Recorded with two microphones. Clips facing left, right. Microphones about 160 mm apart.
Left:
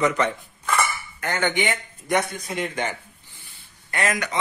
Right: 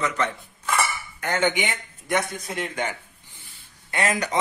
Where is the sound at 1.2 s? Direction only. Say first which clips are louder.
Right 1 dB; 5° right (ahead or behind).